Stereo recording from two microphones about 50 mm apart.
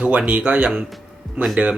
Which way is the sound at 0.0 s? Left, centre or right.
Right.